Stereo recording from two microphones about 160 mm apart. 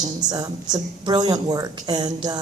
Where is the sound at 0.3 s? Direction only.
25° right (ahead or behind).